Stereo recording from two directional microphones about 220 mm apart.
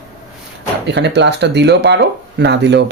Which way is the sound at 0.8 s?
50° right (ahead or behind).